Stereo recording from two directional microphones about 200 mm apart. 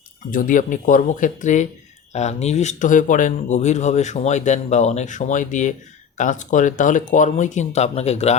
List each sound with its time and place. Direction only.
0.3 s speech: 40° left (ahead or behind)